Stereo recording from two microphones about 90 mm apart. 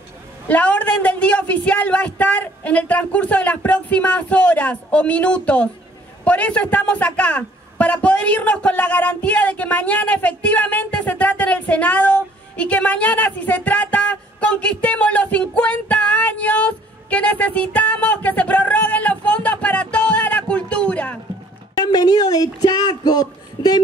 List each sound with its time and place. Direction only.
0.5 s a man's voice: 15° left (ahead or behind)
21.7 s speech: 45° left (ahead or behind)